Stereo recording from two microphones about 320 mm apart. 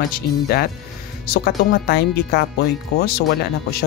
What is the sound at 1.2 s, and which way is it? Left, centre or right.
Speech, left.